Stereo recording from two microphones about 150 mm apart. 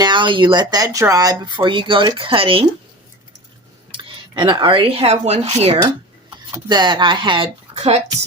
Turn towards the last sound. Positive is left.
turn(degrees=-45)  # may be behind; listen again after turning